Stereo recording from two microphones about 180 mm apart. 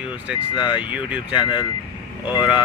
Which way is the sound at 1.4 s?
25° left (ahead or behind).